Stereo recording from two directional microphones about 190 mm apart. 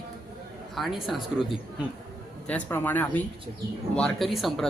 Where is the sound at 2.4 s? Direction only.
10° left (ahead or behind).